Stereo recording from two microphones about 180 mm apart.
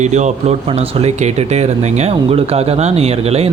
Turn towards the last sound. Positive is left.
turn(degrees=-35)  # may be behind; listen again after turning